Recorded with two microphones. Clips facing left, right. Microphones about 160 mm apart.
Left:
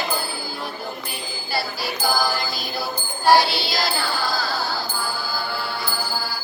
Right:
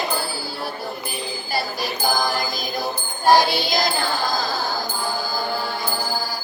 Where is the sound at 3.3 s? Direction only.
45° right (ahead or behind).